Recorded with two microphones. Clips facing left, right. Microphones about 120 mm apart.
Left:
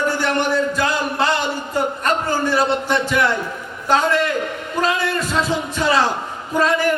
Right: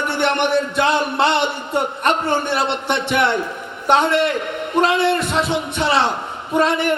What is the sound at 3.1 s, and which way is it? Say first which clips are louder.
A man's voice: right 1 dB; 25° right (ahead or behind).